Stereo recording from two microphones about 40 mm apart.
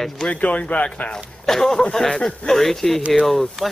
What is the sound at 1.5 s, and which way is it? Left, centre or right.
Speech, centre.